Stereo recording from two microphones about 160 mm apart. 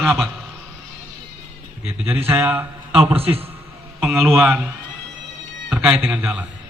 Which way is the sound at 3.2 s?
35° right (ahead or behind).